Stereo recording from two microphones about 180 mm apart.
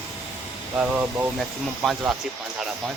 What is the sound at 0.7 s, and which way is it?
Speech, 5° right (ahead or behind).